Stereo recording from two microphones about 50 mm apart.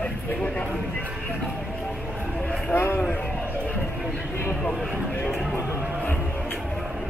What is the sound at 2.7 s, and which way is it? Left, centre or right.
Speech, left.